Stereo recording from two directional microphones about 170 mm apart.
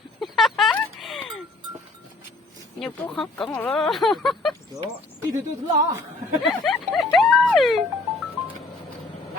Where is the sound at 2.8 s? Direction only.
5° left (ahead or behind).